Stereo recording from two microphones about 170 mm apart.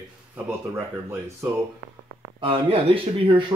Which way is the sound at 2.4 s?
35° right (ahead or behind).